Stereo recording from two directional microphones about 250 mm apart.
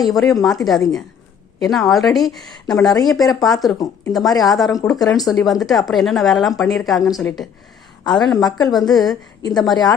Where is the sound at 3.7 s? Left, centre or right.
Centre.